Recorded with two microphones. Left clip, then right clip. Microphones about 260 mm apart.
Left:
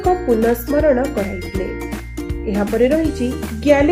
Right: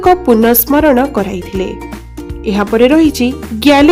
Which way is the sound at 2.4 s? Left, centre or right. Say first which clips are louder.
Right 7 dB; right.